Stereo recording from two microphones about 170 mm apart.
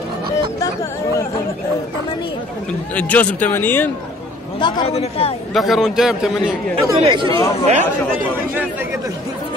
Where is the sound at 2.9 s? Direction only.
10° left (ahead or behind).